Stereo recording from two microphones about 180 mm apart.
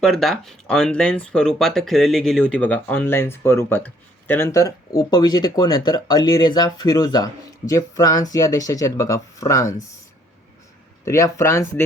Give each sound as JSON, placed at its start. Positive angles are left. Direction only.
{"t": 0.0, "sound": "speech", "side_deg": 0}
{"t": 11.0, "sound": "speech", "side_deg": 15}